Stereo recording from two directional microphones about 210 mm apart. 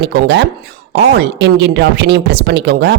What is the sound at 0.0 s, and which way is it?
Speech, 55° right (ahead or behind).